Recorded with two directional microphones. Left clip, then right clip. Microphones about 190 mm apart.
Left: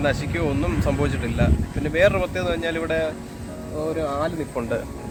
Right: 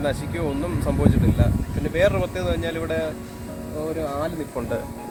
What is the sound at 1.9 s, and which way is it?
Speech, 10° right (ahead or behind).